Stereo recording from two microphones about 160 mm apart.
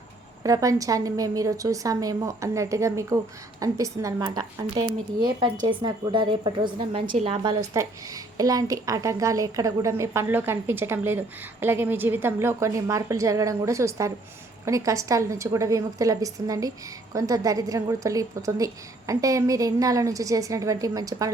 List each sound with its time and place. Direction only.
0.4 s a woman's voice: 20° right (ahead or behind)
7.0 s a woman's voice: 55° right (ahead or behind)
7.7 s a woman's voice: 20° right (ahead or behind)